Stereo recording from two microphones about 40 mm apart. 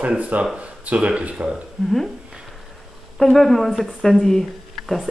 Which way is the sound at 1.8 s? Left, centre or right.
Centre.